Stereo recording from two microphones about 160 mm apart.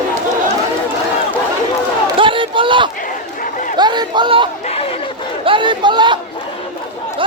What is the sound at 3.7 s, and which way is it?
Chatter, 25° right (ahead or behind).